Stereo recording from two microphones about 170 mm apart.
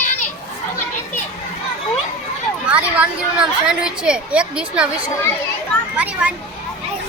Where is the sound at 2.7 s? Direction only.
10° right (ahead or behind).